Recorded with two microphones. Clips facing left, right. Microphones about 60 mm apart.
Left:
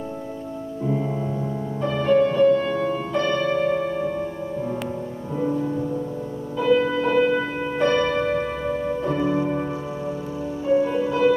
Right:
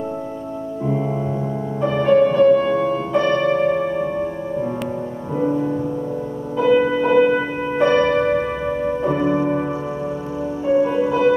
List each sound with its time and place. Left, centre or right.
1.8 s music: centre
10.7 s music: right